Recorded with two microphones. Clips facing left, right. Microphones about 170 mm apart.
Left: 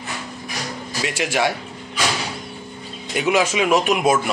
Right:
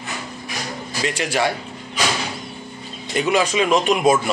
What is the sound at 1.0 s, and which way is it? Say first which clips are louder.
Speech: even; 10° left (ahead or behind).